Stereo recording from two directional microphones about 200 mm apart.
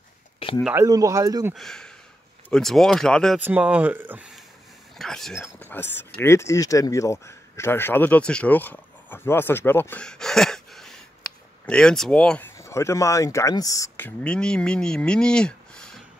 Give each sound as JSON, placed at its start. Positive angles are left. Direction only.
{"t": 0.7, "sound": "speech", "side_deg": -15}
{"t": 1.5, "sound": "speech", "side_deg": 0}
{"t": 3.3, "sound": "speech", "side_deg": -10}
{"t": 4.9, "sound": "speech", "side_deg": 0}